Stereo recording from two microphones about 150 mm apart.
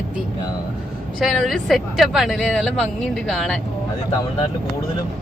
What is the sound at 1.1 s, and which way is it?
Speech, centre (ahead or behind).